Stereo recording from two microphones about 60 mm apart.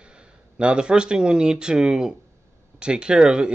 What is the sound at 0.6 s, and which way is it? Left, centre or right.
Speech, centre.